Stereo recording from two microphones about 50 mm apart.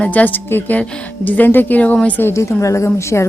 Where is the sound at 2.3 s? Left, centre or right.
Left.